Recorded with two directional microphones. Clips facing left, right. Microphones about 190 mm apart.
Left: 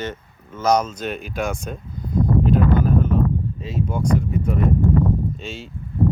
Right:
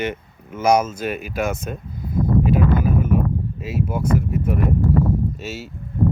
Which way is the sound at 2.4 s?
5° right (ahead or behind).